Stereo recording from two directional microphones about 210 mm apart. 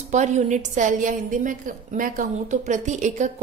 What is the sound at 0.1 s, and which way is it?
A woman's voice, 35° right (ahead or behind).